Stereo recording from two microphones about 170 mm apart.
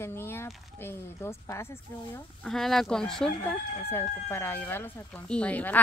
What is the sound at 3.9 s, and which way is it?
Speech, 15° left (ahead or behind).